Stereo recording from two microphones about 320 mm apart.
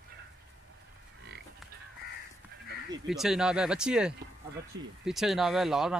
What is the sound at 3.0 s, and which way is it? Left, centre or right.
Speech, centre.